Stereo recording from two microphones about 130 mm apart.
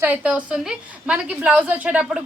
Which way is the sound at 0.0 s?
10° right (ahead or behind).